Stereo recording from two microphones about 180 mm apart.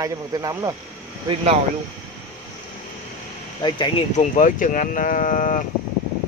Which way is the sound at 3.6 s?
25° left (ahead or behind).